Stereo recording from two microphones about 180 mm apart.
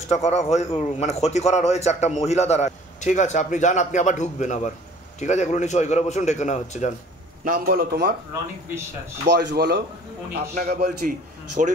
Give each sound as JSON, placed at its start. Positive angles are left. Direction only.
{"t": 0.1, "sound": "a man's voice", "side_deg": 40}
{"t": 7.4, "sound": "a man's voice", "side_deg": -55}
{"t": 9.3, "sound": "speech", "side_deg": -70}
{"t": 10.3, "sound": "a man's voice", "side_deg": -55}